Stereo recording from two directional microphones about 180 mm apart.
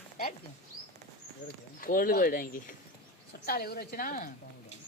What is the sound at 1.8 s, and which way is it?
Speech, 55° left (ahead or behind).